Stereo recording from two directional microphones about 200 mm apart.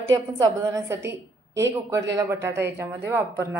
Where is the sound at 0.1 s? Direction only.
15° right (ahead or behind).